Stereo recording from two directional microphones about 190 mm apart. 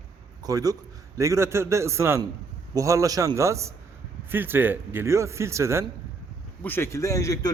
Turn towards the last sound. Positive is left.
turn(degrees=15)  # may be behind; listen again after turning